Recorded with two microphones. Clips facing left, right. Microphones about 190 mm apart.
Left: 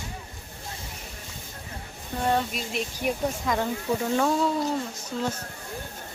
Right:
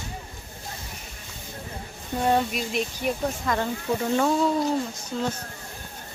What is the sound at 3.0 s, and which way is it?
Speech, 10° left (ahead or behind).